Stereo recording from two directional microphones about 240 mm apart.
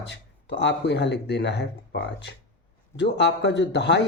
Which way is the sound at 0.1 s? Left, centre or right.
Left.